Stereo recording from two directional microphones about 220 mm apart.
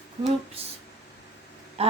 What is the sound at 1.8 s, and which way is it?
Speech, 30° right (ahead or behind).